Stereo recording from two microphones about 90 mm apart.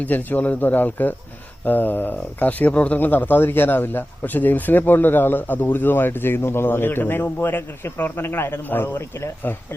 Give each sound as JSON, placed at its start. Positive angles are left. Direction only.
{"t": 0.0, "sound": "speech", "side_deg": 20}